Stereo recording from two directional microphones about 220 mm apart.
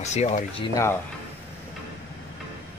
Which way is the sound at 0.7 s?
10° left (ahead or behind).